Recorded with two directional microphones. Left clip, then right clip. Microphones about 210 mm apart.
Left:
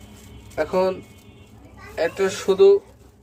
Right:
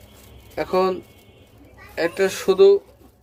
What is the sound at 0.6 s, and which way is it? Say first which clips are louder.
Speech: even; 55° right (ahead or behind).